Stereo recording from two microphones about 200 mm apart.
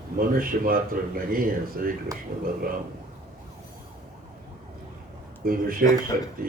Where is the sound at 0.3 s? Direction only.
45° right (ahead or behind).